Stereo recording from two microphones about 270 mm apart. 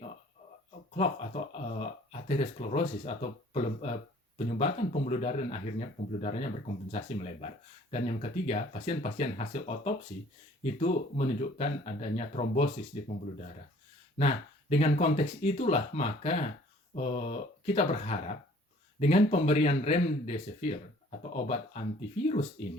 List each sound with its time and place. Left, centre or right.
0.9 s speech: left
14.2 s speech: left